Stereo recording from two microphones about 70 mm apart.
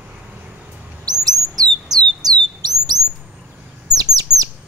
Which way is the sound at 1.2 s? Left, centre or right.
Right.